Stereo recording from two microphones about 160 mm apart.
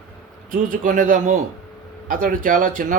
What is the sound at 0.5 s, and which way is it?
A man's voice, 60° right (ahead or behind).